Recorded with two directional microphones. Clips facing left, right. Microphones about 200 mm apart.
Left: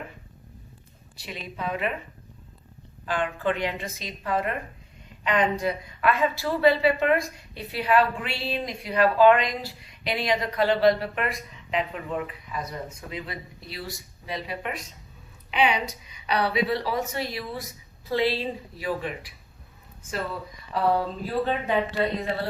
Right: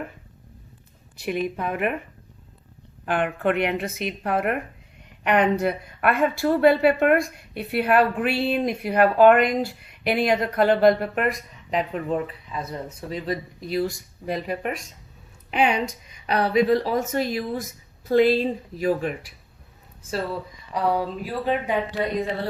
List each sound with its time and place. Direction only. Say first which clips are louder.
1.2 s a woman's voice: right 8 dB; 55° right (ahead or behind)
3.1 s a woman's voice: right 4 dB; 60° right (ahead or behind); by 12.2 s 40° right (ahead or behind)
12.5 s a woman's voice: right 2 dB; 30° right (ahead or behind); by 19.3 s 45° right (ahead or behind)
20.7 s speech: even; 10° right (ahead or behind)